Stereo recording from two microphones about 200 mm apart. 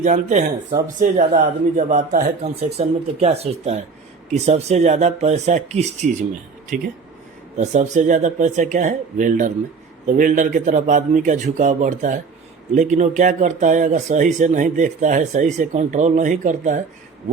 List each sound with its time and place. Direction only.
0.0 s speech: 40° right (ahead or behind)